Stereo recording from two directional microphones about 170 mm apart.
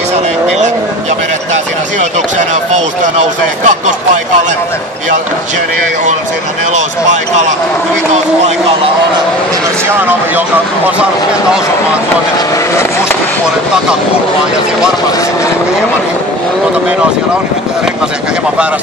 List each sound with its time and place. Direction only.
3.6 s speech: 45° right (ahead or behind)